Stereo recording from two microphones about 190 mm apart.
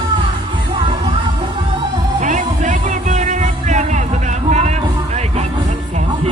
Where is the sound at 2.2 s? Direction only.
40° right (ahead or behind).